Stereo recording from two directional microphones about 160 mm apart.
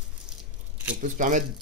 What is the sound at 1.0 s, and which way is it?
Speech, 50° right (ahead or behind).